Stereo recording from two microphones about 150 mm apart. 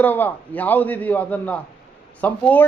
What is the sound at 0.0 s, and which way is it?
A man's voice, 10° left (ahead or behind).